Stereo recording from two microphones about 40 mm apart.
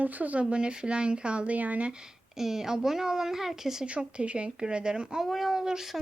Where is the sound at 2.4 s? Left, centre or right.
Centre.